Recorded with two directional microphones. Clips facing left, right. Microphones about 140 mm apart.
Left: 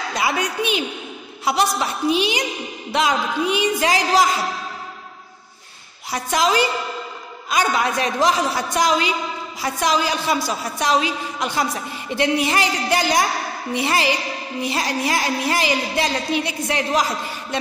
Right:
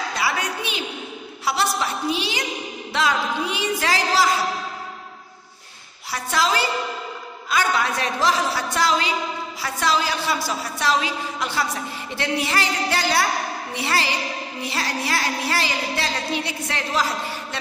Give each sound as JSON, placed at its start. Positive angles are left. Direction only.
{"t": 0.1, "sound": "a woman's voice", "side_deg": 20}
{"t": 6.1, "sound": "a woman's voice", "side_deg": 20}